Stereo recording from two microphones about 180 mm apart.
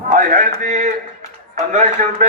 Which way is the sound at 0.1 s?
50° right (ahead or behind).